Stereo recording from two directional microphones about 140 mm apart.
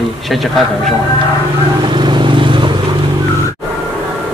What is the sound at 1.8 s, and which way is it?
Vehicle, 35° right (ahead or behind).